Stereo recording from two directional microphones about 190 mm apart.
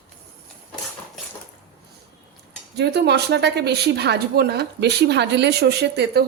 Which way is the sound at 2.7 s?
60° right (ahead or behind).